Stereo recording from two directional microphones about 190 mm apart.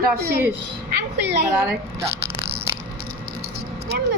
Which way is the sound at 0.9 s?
60° right (ahead or behind).